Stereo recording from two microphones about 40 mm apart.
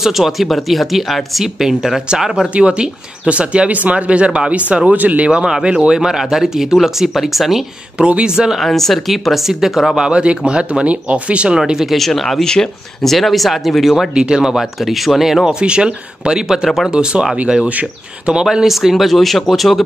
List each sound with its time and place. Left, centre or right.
0.0 s speech: centre
2.5 s speech: right
5.4 s speech: centre
8.5 s speech: centre
10.0 s speech: right
11.5 s speech: centre
11.8 s speech: centre
14.1 s speech: centre
15.4 s speech: right
16.9 s speech: right
17.6 s speech: right
18.3 s speech: centre
18.7 s speech: centre